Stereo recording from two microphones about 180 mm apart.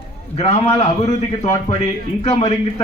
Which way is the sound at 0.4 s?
35° left (ahead or behind).